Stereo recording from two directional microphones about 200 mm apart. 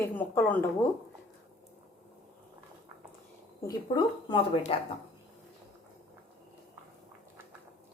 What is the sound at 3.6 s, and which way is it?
Speech, 20° left (ahead or behind).